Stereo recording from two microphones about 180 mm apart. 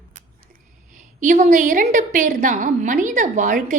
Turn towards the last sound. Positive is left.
turn(degrees=-45)  # may be behind; listen again after turning